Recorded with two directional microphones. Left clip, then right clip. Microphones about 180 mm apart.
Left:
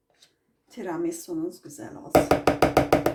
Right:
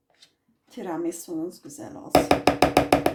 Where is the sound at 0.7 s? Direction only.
30° right (ahead or behind).